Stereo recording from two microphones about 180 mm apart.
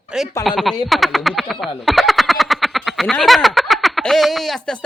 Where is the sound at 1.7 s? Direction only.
Centre (ahead or behind).